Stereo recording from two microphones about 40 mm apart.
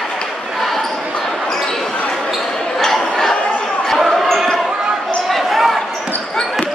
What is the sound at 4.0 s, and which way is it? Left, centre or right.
Basketball bounce, centre.